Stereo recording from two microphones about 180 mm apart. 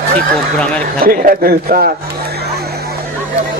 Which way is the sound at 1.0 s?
50° right (ahead or behind).